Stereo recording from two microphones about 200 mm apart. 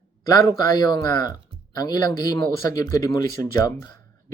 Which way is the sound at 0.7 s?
20° left (ahead or behind).